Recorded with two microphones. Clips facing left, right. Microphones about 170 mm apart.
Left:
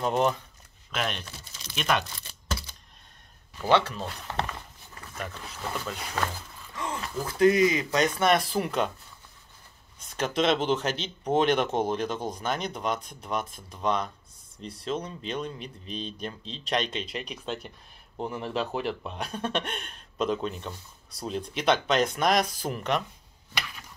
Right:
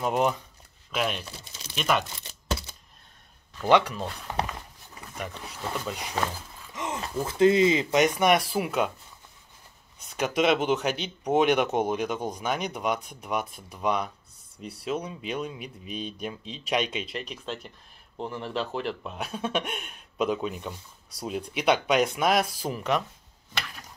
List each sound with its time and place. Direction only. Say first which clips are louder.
0.0 s speech: even; 10° right (ahead or behind)
1.6 s crumpling: right 1 dB; 5° right (ahead or behind)
3.9 s speech: right 2 dB; 10° right (ahead or behind)
9.9 s speech: right 1 dB; 10° right (ahead or behind)